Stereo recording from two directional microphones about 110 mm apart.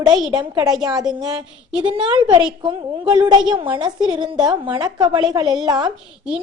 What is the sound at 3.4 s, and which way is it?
A woman's voice, 50° right (ahead or behind).